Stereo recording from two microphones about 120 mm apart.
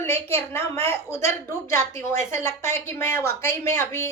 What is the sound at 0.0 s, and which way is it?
A woman's voice, 20° left (ahead or behind).